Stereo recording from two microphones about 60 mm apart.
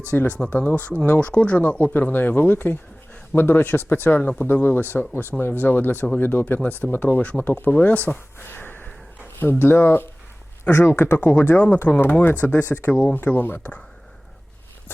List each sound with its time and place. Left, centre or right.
0.1 s speech: left
7.2 s speech: left
12.9 s speech: centre
13.1 s speech: left